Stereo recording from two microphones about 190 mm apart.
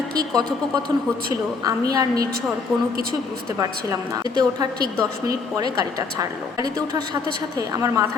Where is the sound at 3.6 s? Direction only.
20° right (ahead or behind).